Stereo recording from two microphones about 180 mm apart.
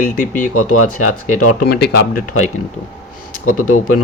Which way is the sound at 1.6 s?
60° left (ahead or behind).